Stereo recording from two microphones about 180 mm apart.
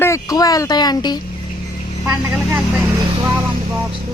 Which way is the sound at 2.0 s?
10° right (ahead or behind).